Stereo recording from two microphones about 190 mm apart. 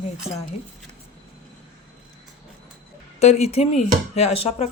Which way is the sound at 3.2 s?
35° left (ahead or behind).